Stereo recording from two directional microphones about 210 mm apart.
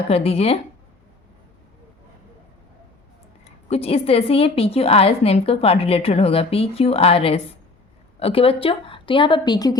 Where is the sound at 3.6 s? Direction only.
30° left (ahead or behind).